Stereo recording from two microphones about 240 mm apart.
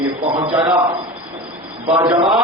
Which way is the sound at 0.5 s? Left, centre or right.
Right.